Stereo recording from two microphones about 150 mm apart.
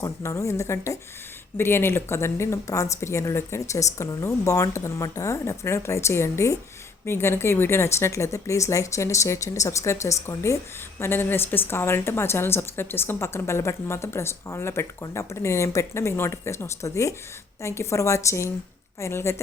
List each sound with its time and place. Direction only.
0.0 s a woman's voice: 20° left (ahead or behind)